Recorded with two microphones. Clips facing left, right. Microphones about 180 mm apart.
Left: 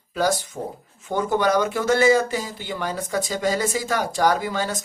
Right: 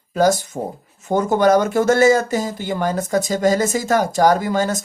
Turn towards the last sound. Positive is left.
turn(degrees=-45)  # may be behind; listen again after turning